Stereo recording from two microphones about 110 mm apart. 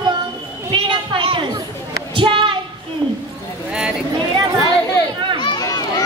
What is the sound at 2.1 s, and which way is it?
Child singing, 50° right (ahead or behind).